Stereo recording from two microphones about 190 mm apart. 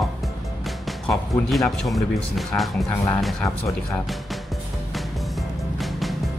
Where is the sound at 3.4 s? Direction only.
15° left (ahead or behind).